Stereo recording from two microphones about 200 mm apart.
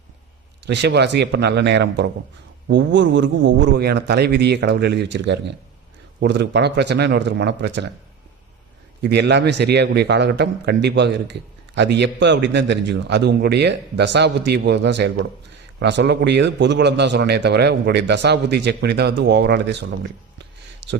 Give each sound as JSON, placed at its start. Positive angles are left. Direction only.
{"t": 0.6, "sound": "a man's voice", "side_deg": -60}
{"t": 9.0, "sound": "a man's voice", "side_deg": -55}
{"t": 20.4, "sound": "a sound", "side_deg": -60}